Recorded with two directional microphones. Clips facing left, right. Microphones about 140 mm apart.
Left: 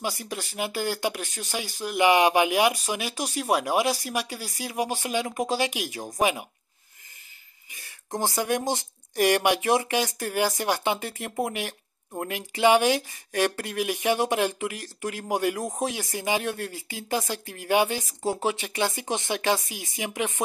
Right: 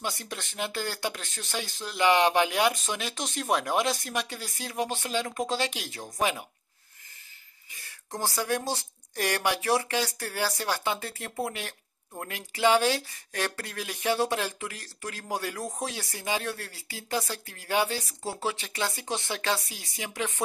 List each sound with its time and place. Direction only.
0.0 s speech: 10° left (ahead or behind)
7.7 s speech: 20° left (ahead or behind)